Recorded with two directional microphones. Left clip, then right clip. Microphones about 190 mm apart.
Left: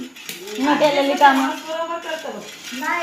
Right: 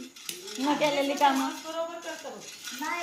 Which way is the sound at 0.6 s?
10° right (ahead or behind).